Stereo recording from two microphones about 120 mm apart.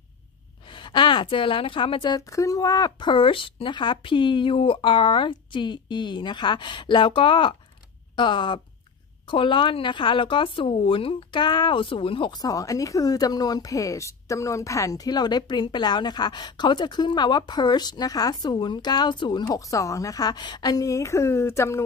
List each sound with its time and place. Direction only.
0.7 s a woman's voice: 40° left (ahead or behind)
2.1 s speech: 30° left (ahead or behind)